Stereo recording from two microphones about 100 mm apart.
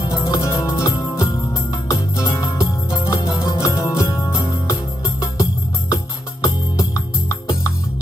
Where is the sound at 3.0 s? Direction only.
40° left (ahead or behind).